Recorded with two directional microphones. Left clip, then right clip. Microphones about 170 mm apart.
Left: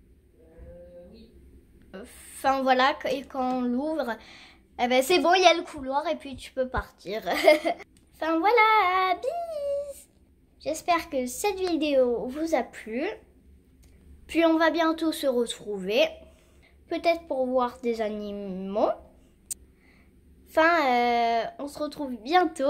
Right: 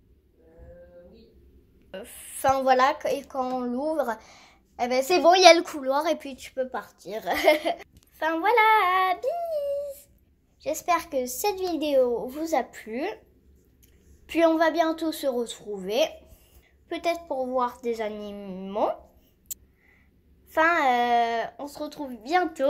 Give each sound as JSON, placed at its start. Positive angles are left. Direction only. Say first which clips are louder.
{"t": 1.9, "sound": "a woman's voice", "louder": "right 4 dB", "side_deg": 0}
{"t": 5.4, "sound": "a woman's voice", "louder": "right 5 dB", "side_deg": -25}
{"t": 6.1, "sound": "speech", "louder": "right 2 dB", "side_deg": -15}
{"t": 6.5, "sound": "a woman's voice", "louder": "left 2 dB", "side_deg": 10}
{"t": 14.2, "sound": "a woman's voice", "louder": "right 1 dB", "side_deg": 5}
{"t": 20.5, "sound": "a woman's voice", "louder": "even", "side_deg": 10}